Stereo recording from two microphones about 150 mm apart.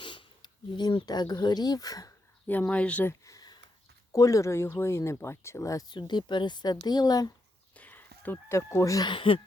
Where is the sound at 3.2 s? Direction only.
25° left (ahead or behind).